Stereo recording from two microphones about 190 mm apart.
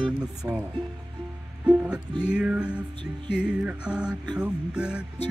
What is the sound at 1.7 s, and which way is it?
Music, 5° right (ahead or behind).